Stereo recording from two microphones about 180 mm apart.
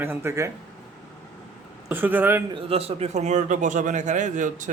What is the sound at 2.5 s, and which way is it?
Speech, 35° right (ahead or behind).